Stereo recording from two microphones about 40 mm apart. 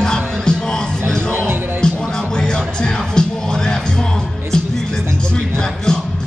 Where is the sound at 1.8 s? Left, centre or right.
Left.